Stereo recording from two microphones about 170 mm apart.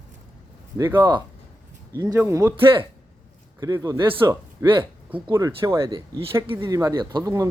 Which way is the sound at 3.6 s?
20° right (ahead or behind).